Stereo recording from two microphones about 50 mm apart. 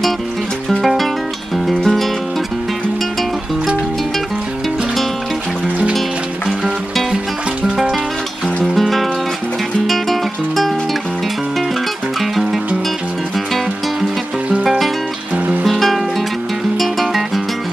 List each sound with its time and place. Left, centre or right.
0.7 s music: centre
7.6 s music: centre
8.7 s music: centre
14.6 s music: centre